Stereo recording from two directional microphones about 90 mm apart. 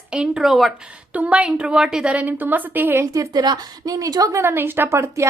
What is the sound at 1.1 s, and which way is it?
A woman's voice, 15° right (ahead or behind).